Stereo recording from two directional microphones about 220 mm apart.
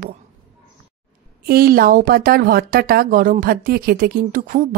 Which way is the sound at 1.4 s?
45° right (ahead or behind).